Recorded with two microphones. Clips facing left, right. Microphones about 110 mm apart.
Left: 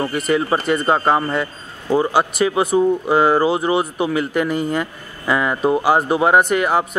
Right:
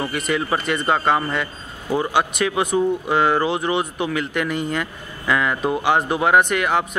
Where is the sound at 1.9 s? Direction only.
10° right (ahead or behind).